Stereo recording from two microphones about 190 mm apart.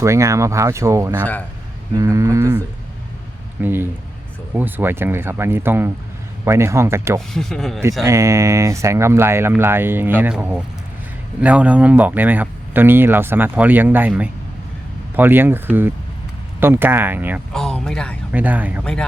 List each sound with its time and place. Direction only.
0.0 s speech: 15° right (ahead or behind)
1.2 s speech: 10° left (ahead or behind)
2.0 s speech: 15° right (ahead or behind)
3.6 s speech: 10° right (ahead or behind)
7.3 s speech: centre (ahead or behind)
8.0 s speech: 15° right (ahead or behind)
17.5 s speech: 5° left (ahead or behind)
18.3 s speech: 10° right (ahead or behind)